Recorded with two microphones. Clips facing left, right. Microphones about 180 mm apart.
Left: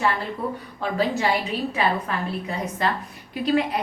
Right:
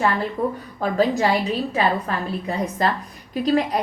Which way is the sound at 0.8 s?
40° right (ahead or behind).